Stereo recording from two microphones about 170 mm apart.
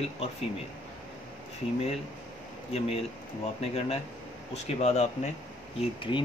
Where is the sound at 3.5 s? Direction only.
35° left (ahead or behind).